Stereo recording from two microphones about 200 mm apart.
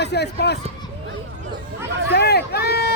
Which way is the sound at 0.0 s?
55° left (ahead or behind).